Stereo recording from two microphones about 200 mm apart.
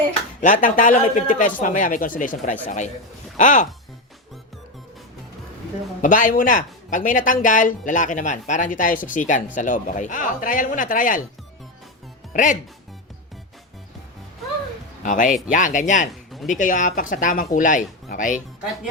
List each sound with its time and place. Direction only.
0.4 s speech: 40° left (ahead or behind)
6.0 s speech: 40° left (ahead or behind)
12.3 s speech: 40° left (ahead or behind)
15.0 s speech: 40° left (ahead or behind)